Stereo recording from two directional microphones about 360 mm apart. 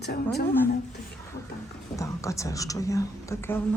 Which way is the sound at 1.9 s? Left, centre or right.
Centre.